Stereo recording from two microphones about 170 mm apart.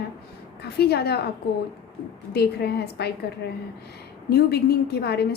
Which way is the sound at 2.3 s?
70° left (ahead or behind).